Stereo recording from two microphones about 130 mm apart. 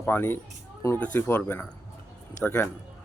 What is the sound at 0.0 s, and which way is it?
Speech, 15° left (ahead or behind).